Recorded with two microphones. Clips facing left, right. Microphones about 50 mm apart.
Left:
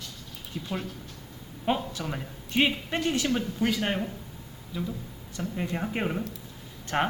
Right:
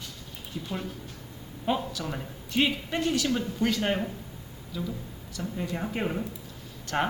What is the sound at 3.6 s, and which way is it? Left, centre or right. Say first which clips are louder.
Speech: right 2 dB; centre.